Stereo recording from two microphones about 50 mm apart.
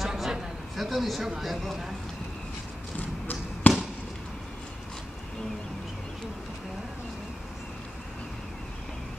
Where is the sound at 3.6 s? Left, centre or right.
Left.